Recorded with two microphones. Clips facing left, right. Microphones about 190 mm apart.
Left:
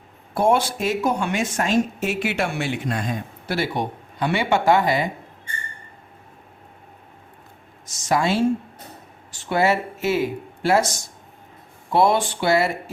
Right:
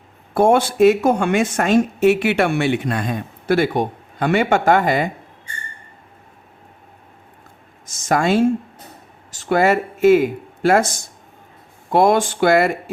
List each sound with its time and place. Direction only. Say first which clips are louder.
0.3 s speech: right 6 dB; 55° right (ahead or behind)
8.0 s speech: right 4 dB; 50° right (ahead or behind)